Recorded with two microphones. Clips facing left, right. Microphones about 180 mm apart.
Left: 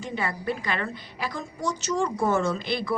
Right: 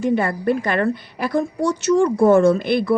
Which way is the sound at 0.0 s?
55° right (ahead or behind).